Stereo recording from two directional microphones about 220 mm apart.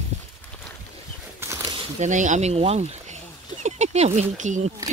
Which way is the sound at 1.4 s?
15° right (ahead or behind).